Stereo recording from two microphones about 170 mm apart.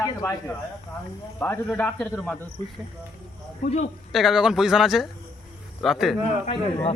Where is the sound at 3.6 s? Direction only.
40° left (ahead or behind).